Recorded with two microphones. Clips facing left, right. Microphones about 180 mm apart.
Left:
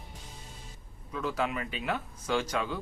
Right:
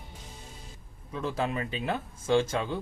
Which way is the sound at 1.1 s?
30° right (ahead or behind).